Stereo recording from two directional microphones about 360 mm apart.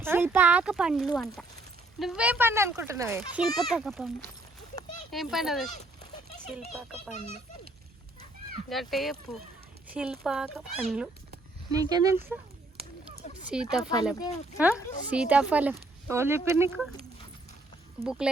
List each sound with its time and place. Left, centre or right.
0.0 s speech: centre
8.7 s speech: centre
13.5 s speech: centre
14.2 s speech: centre
14.6 s speech: centre